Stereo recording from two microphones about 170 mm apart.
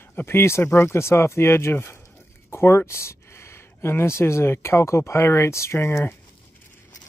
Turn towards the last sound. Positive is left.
turn(degrees=15)  # may be behind; listen again after turning